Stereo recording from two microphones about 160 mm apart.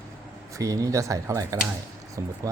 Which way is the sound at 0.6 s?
20° right (ahead or behind).